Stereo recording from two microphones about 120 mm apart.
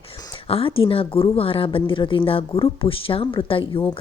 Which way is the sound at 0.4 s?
50° left (ahead or behind).